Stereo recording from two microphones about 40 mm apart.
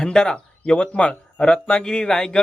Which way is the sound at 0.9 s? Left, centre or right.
Left.